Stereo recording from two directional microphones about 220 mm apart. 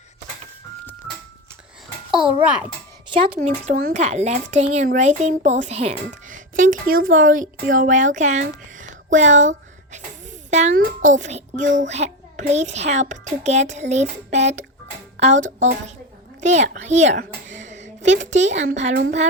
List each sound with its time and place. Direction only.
2.0 s a child's voice: 5° right (ahead or behind)
3.3 s a child's voice: 35° right (ahead or behind)